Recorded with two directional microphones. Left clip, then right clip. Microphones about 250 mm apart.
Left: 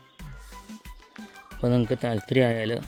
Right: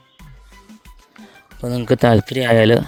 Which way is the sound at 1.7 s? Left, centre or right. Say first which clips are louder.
Right 17 dB; right.